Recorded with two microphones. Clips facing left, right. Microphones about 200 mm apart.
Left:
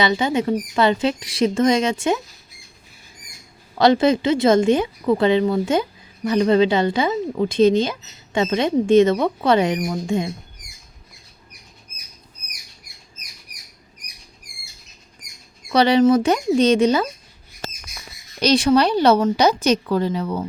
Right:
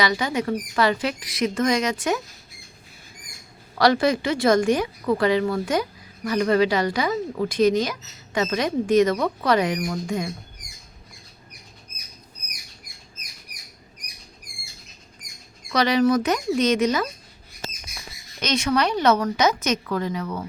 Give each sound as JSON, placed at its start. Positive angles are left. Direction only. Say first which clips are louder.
{"t": 0.0, "sound": "speech", "louder": "left 4 dB", "side_deg": 25}
{"t": 3.8, "sound": "speech", "louder": "left 4 dB", "side_deg": 25}
{"t": 15.7, "sound": "speech", "louder": "left 5 dB", "side_deg": 30}
{"t": 18.3, "sound": "speech", "louder": "left 7 dB", "side_deg": 35}